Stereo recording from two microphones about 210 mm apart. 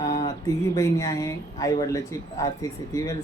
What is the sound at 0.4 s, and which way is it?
Speech, 15° left (ahead or behind).